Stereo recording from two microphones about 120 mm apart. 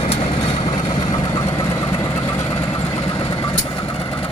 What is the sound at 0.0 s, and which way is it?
Vehicle, 55° left (ahead or behind).